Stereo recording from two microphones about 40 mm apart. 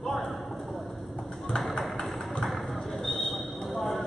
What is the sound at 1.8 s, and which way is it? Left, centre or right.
Vehicle, centre.